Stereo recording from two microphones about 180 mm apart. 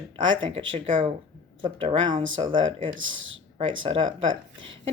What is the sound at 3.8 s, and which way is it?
Speech, 30° right (ahead or behind).